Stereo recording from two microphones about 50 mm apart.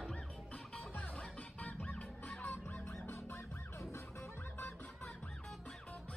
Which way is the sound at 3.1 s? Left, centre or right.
Left.